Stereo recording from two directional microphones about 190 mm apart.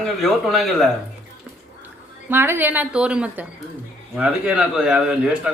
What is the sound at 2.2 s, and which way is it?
A woman's voice, 10° right (ahead or behind).